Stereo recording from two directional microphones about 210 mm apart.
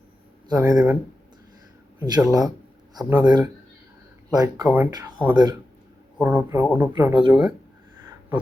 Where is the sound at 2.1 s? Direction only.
20° right (ahead or behind).